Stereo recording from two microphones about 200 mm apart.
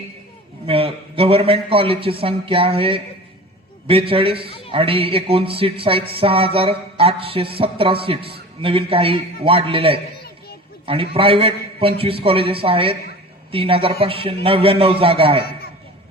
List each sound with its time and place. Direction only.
0.7 s music: 30° right (ahead or behind)